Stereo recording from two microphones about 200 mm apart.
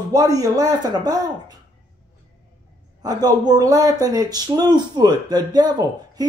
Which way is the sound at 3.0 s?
20° right (ahead or behind).